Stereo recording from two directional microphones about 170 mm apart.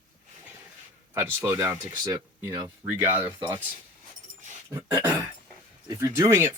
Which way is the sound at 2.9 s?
10° right (ahead or behind).